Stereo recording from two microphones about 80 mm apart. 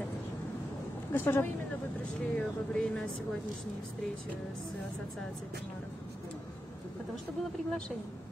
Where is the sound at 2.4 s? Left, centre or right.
Centre.